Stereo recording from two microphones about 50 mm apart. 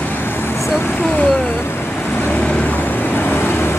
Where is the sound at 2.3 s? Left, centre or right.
Left.